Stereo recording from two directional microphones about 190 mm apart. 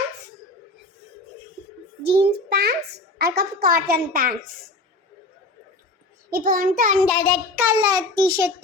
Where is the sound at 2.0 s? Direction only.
60° right (ahead or behind).